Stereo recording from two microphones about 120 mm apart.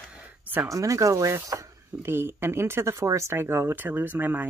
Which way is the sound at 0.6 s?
25° right (ahead or behind).